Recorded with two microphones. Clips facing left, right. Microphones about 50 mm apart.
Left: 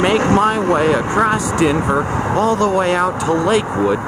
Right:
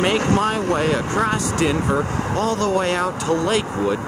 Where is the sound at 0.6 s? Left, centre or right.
Centre.